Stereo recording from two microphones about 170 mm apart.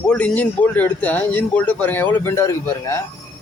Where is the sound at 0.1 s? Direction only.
10° left (ahead or behind).